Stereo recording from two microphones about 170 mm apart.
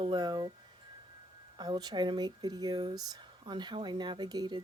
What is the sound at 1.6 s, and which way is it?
Speech, 25° right (ahead or behind).